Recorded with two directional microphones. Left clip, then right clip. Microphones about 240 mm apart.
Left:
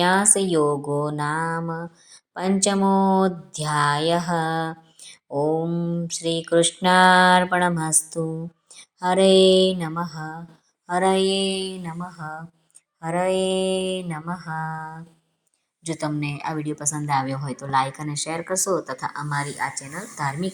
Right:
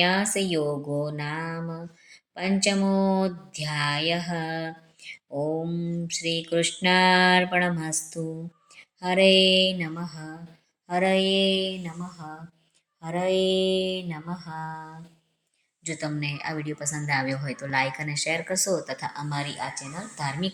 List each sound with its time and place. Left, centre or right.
0.0 s mantra: centre
2.3 s a woman's voice: centre
4.0 s mantra: centre
5.0 s a sound: centre
6.5 s a woman's voice: centre
8.7 s music: centre
9.6 s mantra: centre
13.0 s a woman's voice: centre